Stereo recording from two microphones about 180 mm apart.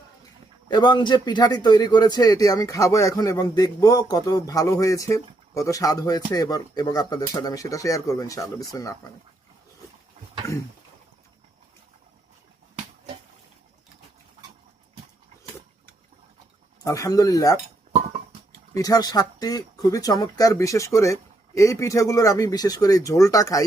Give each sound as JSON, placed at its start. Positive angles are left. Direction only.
{"t": 0.7, "sound": "a man's voice", "side_deg": 25}
{"t": 10.4, "sound": "a sound", "side_deg": 20}
{"t": 16.8, "sound": "a man's voice", "side_deg": 20}
{"t": 18.7, "sound": "a man's voice", "side_deg": 20}